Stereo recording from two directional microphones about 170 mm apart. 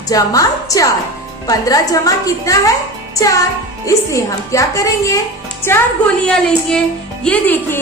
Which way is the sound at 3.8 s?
20° left (ahead or behind).